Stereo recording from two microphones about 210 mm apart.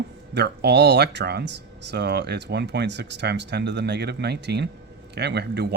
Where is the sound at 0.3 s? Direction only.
55° right (ahead or behind).